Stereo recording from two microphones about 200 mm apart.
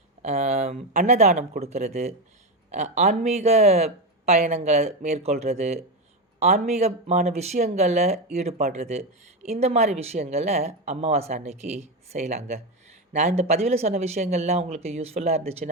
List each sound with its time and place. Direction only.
0.2 s speech: 35° right (ahead or behind)